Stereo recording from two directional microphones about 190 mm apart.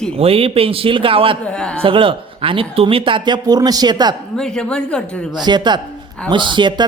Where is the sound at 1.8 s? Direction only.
25° right (ahead or behind).